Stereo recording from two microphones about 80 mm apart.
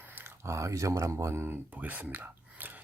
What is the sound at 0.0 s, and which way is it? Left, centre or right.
Speech, right.